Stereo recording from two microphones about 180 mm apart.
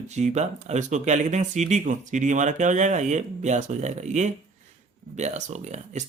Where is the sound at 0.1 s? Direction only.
40° right (ahead or behind).